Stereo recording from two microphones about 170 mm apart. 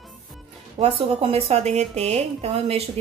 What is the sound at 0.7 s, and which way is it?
A woman's voice, 35° right (ahead or behind).